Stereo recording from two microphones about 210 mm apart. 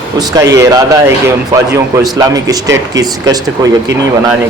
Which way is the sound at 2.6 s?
60° right (ahead or behind).